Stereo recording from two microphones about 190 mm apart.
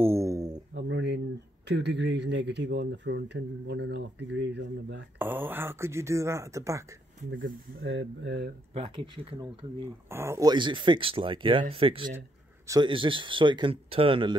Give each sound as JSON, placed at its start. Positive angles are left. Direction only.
{"t": 0.0, "sound": "a sound", "side_deg": -15}
{"t": 0.7, "sound": "a sound", "side_deg": -65}
{"t": 1.7, "sound": "speech", "side_deg": -65}
{"t": 5.2, "sound": "speech", "side_deg": -10}
{"t": 7.2, "sound": "speech", "side_deg": -85}
{"t": 8.7, "sound": "speech", "side_deg": -25}
{"t": 10.0, "sound": "speech", "side_deg": -15}